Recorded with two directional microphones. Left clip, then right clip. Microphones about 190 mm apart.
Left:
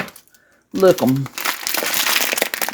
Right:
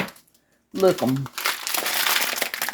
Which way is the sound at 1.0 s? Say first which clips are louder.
Left 5 dB; 45° left (ahead or behind).